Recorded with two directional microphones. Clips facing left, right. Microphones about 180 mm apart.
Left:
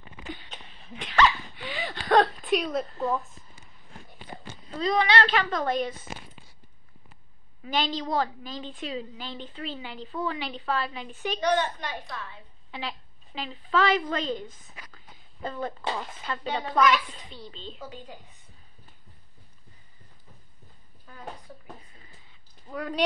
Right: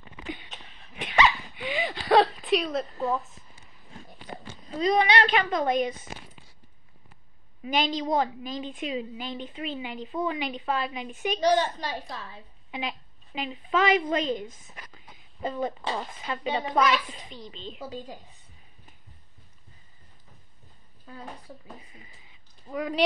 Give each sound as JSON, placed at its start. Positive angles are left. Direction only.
{"t": 1.0, "sound": "a sound", "side_deg": -10}
{"t": 4.7, "sound": "a woman's voice", "side_deg": -20}
{"t": 7.6, "sound": "a woman's voice", "side_deg": -15}
{"t": 11.5, "sound": "a woman's voice", "side_deg": -35}
{"t": 12.7, "sound": "a woman's voice", "side_deg": -15}
{"t": 17.8, "sound": "a woman's voice", "side_deg": -35}
{"t": 22.7, "sound": "a woman's voice", "side_deg": -10}